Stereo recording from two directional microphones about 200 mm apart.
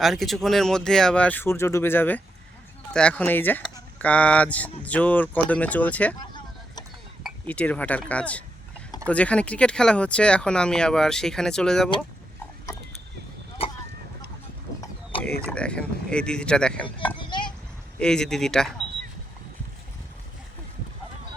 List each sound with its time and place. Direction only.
0.0 s speech: centre (ahead or behind)
6.1 s vehicle: 20° left (ahead or behind)
7.2 s speech: centre (ahead or behind)
13.6 s honk: 30° left (ahead or behind)
15.4 s speech: 5° left (ahead or behind)
17.2 s a sound: 25° left (ahead or behind)
18.0 s speech: 5° left (ahead or behind)